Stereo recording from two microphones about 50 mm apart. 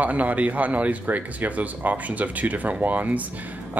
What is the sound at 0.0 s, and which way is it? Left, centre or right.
Speech, right.